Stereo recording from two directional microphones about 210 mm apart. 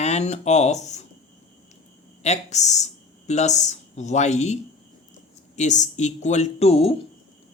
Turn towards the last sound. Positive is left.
turn(degrees=30)  # may be behind; listen again after turning